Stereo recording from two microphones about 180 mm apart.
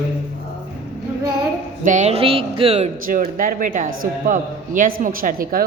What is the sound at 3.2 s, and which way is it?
A man's voice, 50° right (ahead or behind).